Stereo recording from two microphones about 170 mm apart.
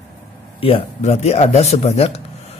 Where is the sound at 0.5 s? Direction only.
35° left (ahead or behind).